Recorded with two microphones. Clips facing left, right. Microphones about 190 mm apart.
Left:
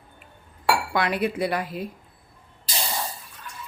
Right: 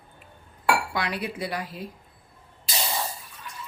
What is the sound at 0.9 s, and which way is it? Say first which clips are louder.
Speech: left 6 dB; 55° left (ahead or behind).